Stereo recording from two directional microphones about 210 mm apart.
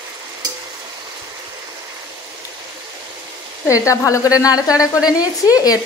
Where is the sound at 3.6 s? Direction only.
15° left (ahead or behind).